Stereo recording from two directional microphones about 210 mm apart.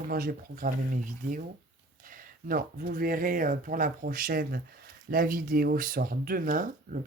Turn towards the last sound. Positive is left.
turn(degrees=-40)  # may be behind; listen again after turning